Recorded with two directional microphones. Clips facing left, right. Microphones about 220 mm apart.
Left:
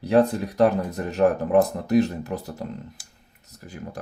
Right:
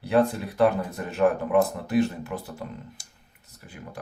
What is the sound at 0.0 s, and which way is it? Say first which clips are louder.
Speech: left 3 dB; 40° left (ahead or behind).